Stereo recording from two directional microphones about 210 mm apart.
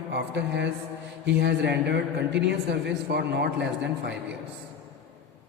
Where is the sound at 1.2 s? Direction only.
55° right (ahead or behind).